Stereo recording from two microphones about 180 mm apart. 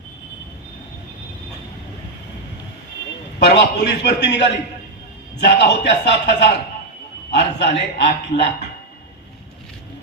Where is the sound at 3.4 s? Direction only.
70° left (ahead or behind).